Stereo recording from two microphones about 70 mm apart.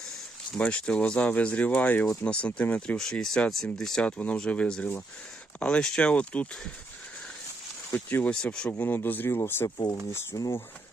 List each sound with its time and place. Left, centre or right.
0.5 s speech: centre
3.0 s speech: centre
8.2 s speech: centre
9.7 s speech: left
10.3 s speech: left